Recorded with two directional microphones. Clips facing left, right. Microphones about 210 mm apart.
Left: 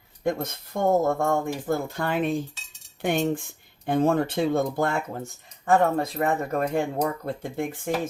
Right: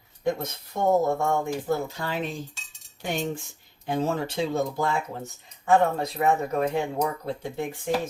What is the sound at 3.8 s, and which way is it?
Speech, 55° left (ahead or behind).